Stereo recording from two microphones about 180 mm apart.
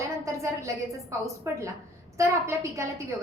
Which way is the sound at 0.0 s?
15° right (ahead or behind).